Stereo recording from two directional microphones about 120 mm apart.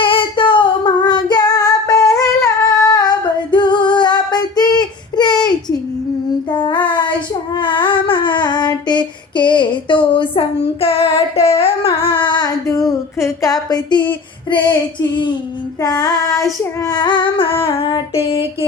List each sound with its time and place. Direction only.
0.0 s female singing: 45° left (ahead or behind)
6.5 s child singing: 40° left (ahead or behind)
12.6 s a sound: 30° left (ahead or behind)
15.8 s child singing: 30° left (ahead or behind); by 18.4 s 50° left (ahead or behind)